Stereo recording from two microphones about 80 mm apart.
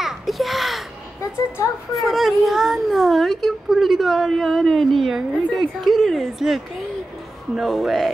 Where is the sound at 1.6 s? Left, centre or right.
Left.